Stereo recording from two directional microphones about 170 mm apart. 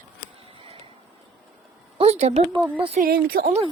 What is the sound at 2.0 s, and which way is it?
A woman's voice, 40° right (ahead or behind).